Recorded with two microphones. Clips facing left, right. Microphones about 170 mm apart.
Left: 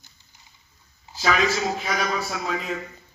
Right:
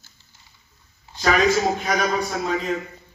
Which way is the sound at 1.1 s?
15° left (ahead or behind).